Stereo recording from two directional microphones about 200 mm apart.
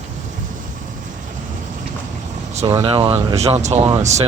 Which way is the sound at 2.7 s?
25° right (ahead or behind).